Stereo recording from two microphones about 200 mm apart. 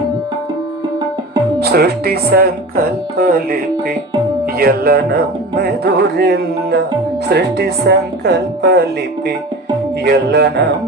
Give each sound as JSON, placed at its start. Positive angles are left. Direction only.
{"t": 1.5, "sound": "speech", "side_deg": -50}
{"t": 10.0, "sound": "speech", "side_deg": -55}